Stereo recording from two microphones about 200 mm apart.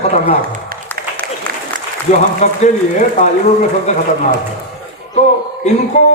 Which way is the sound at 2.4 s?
40° left (ahead or behind).